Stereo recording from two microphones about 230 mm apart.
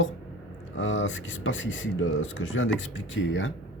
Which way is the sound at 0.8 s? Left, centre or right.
Left.